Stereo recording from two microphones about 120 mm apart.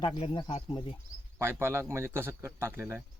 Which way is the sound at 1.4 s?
20° right (ahead or behind).